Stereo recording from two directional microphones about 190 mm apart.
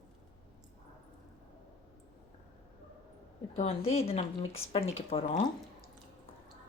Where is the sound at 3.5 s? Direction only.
35° left (ahead or behind).